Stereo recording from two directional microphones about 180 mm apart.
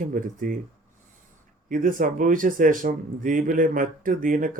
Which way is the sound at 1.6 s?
50° right (ahead or behind).